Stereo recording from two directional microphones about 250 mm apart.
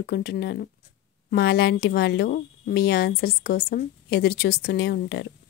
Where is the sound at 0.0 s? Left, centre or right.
Left.